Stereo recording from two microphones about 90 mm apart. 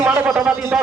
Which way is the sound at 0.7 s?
10° right (ahead or behind).